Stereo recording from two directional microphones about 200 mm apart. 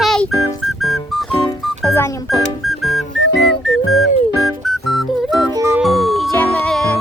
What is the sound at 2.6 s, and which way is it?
Music, centre (ahead or behind).